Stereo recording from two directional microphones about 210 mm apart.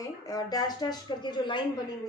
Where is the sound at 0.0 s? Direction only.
15° left (ahead or behind).